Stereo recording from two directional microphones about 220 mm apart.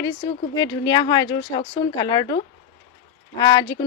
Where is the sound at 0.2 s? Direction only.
20° left (ahead or behind).